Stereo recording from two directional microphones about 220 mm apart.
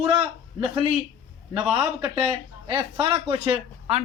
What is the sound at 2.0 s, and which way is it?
Speech, 20° right (ahead or behind).